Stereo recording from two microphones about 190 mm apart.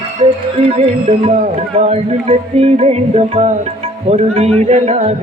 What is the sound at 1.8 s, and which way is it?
Music, 35° right (ahead or behind).